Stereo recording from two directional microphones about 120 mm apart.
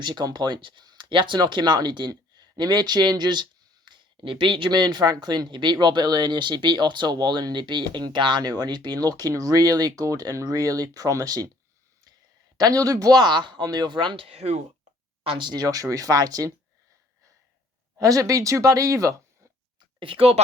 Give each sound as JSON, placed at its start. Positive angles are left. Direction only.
{"t": 0.0, "sound": "speech", "side_deg": -40}
{"t": 12.5, "sound": "speech", "side_deg": -30}
{"t": 14.3, "sound": "speech", "side_deg": -60}
{"t": 15.2, "sound": "speech", "side_deg": -45}
{"t": 17.9, "sound": "speech", "side_deg": -30}
{"t": 20.0, "sound": "speech", "side_deg": -50}